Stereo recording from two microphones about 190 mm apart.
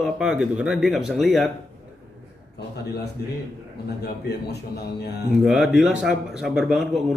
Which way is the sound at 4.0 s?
55° left (ahead or behind).